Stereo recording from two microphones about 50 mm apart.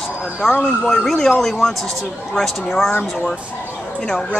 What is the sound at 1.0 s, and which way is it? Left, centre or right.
Speech, centre.